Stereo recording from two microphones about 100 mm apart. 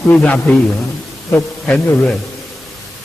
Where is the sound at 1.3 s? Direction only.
15° left (ahead or behind).